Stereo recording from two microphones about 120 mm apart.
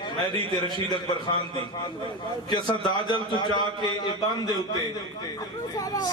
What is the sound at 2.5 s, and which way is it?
A man's voice, 40° left (ahead or behind).